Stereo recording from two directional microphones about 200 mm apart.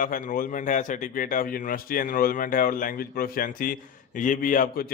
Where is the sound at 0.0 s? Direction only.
40° left (ahead or behind).